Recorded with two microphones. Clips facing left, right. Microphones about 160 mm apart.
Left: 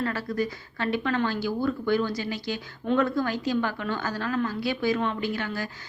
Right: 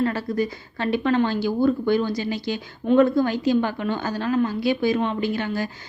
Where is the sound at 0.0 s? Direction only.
20° right (ahead or behind).